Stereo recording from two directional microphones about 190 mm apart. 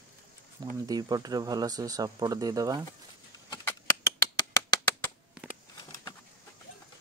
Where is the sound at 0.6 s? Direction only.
20° right (ahead or behind).